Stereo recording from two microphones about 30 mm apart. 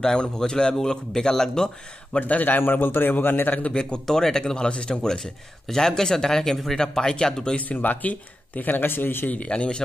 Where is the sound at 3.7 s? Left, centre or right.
Left.